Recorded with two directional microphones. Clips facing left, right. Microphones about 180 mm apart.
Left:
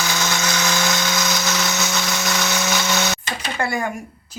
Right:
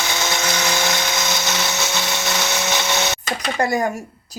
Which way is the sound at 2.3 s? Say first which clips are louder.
Even; 25° right (ahead or behind).